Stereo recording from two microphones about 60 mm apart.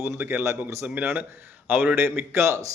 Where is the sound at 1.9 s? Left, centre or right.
Right.